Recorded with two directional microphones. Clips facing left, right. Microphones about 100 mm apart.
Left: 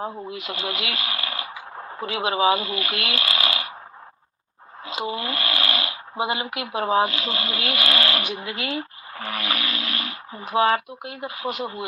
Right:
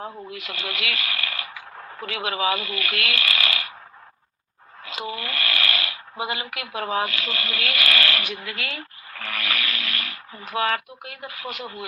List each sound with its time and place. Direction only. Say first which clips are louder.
0.0 s speech: left 4 dB; 25° left (ahead or behind)
4.9 s speech: left 4 dB; 25° left (ahead or behind)